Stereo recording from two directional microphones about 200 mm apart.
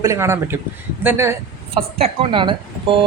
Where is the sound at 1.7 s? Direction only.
25° right (ahead or behind).